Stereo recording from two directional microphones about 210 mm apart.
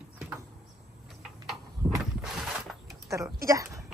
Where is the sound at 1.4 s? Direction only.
5° right (ahead or behind).